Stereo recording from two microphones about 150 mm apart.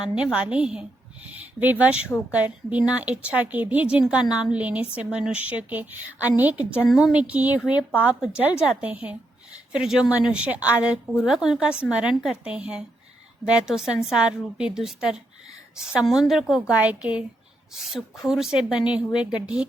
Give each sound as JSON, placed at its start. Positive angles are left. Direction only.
{"t": 0.0, "sound": "a woman's voice", "side_deg": -5}